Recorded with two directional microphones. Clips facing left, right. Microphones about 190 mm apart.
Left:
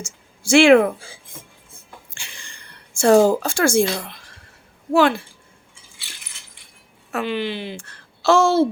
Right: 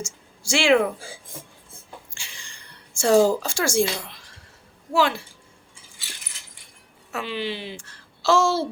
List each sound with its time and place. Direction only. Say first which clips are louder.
0.4 s speech: left 7 dB; 55° left (ahead or behind)
2.1 s a sound: left 3 dB; 60° left (ahead or behind)
4.9 s speech: left 5 dB; 55° left (ahead or behind)
7.1 s a woman's voice: left 5 dB; 55° left (ahead or behind)